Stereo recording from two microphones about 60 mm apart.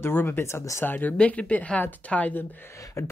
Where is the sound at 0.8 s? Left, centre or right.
Left.